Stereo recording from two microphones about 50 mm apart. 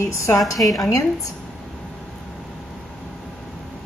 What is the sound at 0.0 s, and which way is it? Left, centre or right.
Speech, left.